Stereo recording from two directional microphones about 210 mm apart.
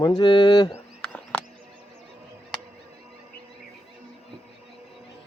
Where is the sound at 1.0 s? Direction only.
5° left (ahead or behind).